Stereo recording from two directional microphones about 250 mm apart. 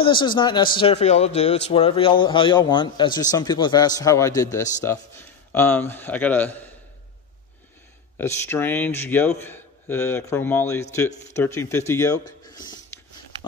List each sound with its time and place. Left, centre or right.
0.0 s a man's voice: centre
8.5 s speech: centre
12.6 s a sound: centre